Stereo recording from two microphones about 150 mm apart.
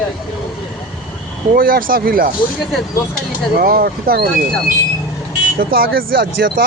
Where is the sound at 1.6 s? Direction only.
70° right (ahead or behind).